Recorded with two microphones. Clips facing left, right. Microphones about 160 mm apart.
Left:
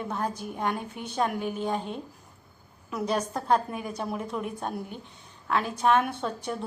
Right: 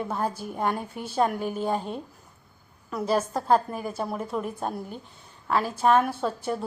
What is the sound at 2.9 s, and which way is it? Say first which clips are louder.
A woman's voice: right 3 dB; centre (ahead or behind).